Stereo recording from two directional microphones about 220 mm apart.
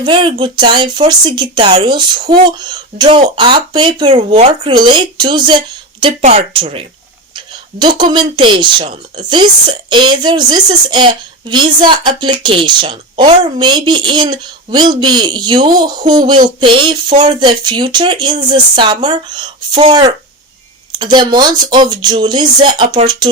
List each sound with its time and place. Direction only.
0.0 s speech: 20° right (ahead or behind)